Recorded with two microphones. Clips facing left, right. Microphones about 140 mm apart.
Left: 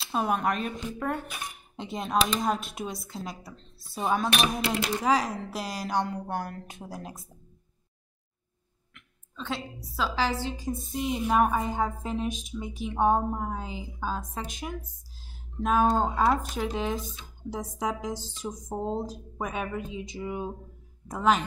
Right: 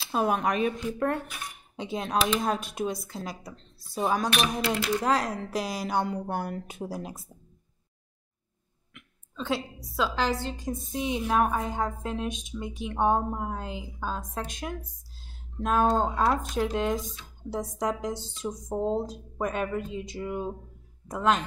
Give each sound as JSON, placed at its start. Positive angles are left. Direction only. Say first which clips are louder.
{"t": 0.1, "sound": "a woman's voice", "louder": "right 1 dB", "side_deg": 0}
{"t": 4.3, "sound": "speech", "louder": "even", "side_deg": 20}
{"t": 5.0, "sound": "a woman's voice", "louder": "left 1 dB", "side_deg": 0}
{"t": 8.9, "sound": "a woman's voice", "louder": "right 4 dB", "side_deg": -5}